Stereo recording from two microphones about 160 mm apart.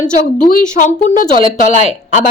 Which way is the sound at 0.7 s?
55° left (ahead or behind).